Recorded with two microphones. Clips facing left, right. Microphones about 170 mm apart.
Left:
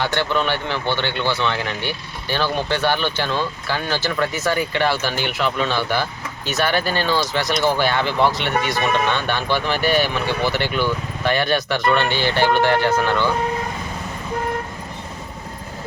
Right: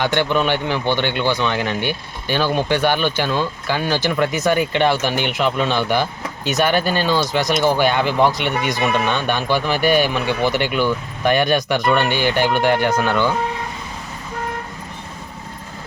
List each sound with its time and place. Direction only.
0.0 s speech: 20° right (ahead or behind)